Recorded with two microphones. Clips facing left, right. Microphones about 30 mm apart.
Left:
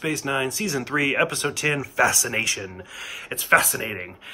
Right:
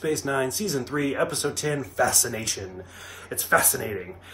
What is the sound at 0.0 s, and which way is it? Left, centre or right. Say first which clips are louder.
Speech: left 1 dB; left.